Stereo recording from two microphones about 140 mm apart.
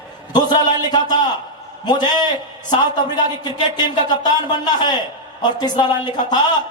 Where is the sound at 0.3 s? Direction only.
30° left (ahead or behind).